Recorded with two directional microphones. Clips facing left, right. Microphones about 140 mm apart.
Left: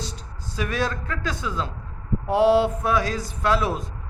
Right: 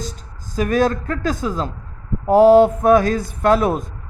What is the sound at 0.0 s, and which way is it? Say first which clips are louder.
A man's voice: right 4 dB; 45° right (ahead or behind).